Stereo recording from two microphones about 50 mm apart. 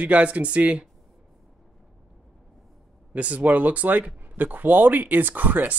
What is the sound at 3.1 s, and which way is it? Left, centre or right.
Speech, right.